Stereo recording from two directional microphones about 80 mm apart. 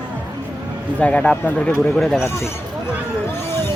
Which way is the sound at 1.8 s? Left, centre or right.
Centre.